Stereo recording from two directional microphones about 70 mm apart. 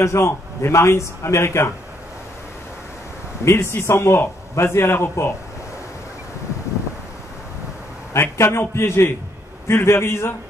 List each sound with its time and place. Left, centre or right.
0.0 s a man's voice: left
3.4 s a man's voice: left
8.1 s a man's voice: left